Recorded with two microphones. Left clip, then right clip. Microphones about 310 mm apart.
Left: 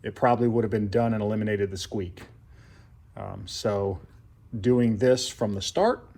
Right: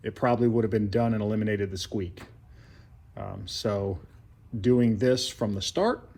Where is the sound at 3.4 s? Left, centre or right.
Centre.